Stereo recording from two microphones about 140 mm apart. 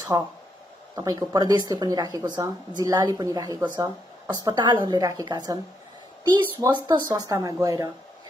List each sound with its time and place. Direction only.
0.1 s speech: 20° right (ahead or behind)